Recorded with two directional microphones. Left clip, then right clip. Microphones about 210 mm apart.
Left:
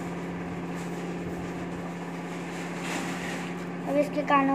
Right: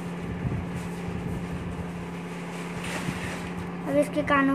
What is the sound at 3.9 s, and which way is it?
Vehicle, 20° right (ahead or behind).